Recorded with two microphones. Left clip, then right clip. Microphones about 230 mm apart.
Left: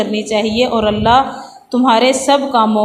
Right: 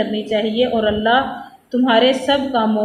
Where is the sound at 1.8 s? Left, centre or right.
Left.